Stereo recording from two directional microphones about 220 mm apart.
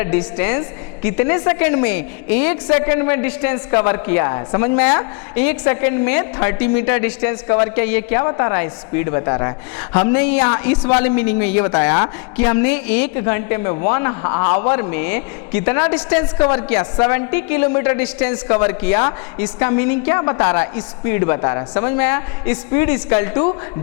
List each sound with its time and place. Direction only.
0.0 s a woman's voice: 15° left (ahead or behind)
2.0 s a woman's voice: 55° left (ahead or behind)
2.4 s a woman's voice: 15° left (ahead or behind)